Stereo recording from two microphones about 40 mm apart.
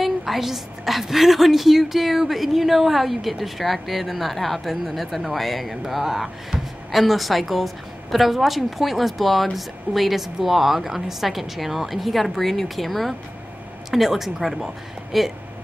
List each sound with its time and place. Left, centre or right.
0.0 s a woman's voice: centre